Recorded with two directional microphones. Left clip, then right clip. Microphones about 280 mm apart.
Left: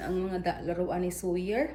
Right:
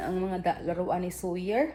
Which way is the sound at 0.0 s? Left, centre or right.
Centre.